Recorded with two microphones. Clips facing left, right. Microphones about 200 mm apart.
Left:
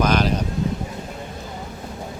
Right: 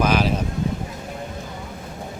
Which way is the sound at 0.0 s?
5° right (ahead or behind).